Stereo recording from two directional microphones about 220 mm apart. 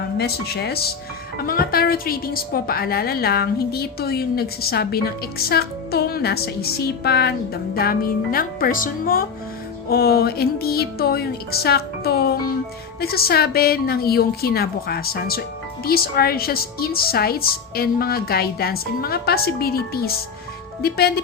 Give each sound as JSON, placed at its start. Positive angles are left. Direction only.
{"t": 0.2, "sound": "speech", "side_deg": 45}